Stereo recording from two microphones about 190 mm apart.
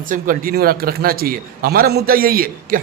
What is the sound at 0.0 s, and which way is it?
A man's voice, 45° right (ahead or behind).